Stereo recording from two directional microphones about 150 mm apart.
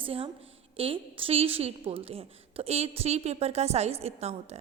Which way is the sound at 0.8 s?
35° right (ahead or behind).